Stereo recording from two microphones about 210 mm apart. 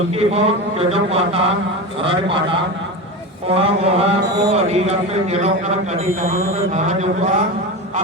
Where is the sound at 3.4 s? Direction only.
30° right (ahead or behind).